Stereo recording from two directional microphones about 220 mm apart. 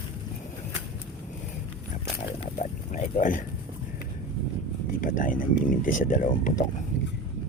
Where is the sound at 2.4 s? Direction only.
35° left (ahead or behind).